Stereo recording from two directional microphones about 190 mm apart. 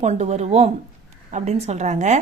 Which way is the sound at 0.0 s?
35° right (ahead or behind).